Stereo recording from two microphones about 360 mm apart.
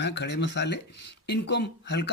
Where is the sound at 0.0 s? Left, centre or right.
Left.